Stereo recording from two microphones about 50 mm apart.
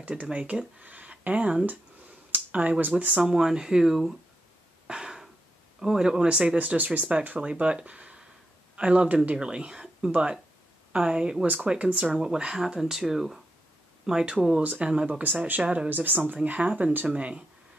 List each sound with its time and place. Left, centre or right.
0.1 s speech: right
3.1 s speech: centre
4.8 s a sound: centre
5.8 s speech: centre; by 9.4 s right
9.4 s speech: centre
11.4 s speech: right; by 14.3 s centre
14.6 s speech: right
15.6 s speech: right
15.9 s speech: right